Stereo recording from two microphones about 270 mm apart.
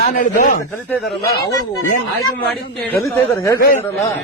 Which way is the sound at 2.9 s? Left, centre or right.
Centre.